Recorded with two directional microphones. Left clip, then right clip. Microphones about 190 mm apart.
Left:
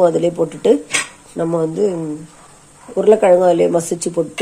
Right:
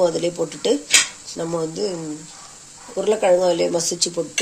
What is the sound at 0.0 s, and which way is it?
Speech, 10° left (ahead or behind).